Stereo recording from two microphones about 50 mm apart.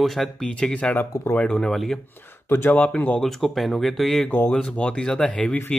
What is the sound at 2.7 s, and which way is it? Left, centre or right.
Speech, left.